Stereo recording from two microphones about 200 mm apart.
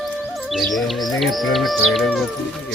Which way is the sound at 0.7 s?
Centre (ahead or behind).